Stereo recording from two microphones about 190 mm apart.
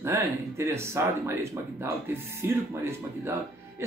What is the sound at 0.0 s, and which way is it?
Speech, 15° right (ahead or behind).